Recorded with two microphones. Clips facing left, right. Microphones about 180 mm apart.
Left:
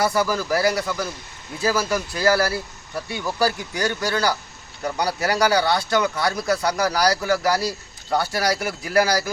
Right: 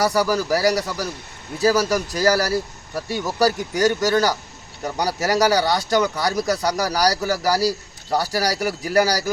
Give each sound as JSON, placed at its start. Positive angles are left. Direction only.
{"t": 0.0, "sound": "speech", "side_deg": -40}